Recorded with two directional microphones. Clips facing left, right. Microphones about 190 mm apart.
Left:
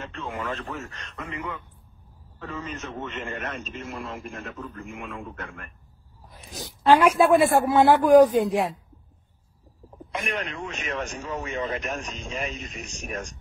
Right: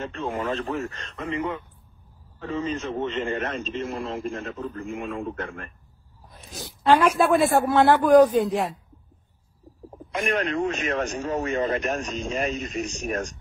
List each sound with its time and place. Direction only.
0.2 s a man's voice: 30° right (ahead or behind)
6.5 s speech: 10° left (ahead or behind)
10.2 s speech: 45° right (ahead or behind)